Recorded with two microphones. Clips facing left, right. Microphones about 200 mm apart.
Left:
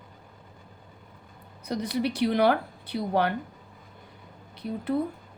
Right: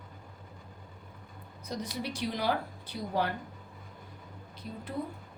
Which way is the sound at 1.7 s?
65° left (ahead or behind).